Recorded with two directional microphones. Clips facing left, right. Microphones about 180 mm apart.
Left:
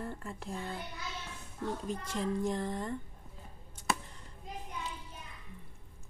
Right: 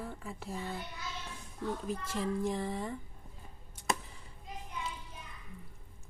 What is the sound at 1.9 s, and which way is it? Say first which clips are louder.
Speech: left 1 dB; 5° right (ahead or behind).